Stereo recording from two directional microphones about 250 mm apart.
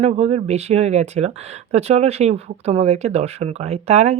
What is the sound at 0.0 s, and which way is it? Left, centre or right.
Speech, right.